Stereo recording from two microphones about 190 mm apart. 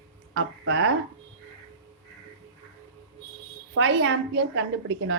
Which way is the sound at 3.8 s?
75° right (ahead or behind).